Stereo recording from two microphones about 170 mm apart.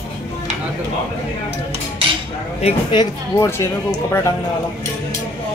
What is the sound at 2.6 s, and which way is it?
Speech, 25° left (ahead or behind).